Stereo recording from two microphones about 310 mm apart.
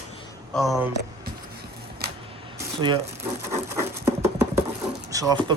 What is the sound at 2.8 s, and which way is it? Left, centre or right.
Speech, centre.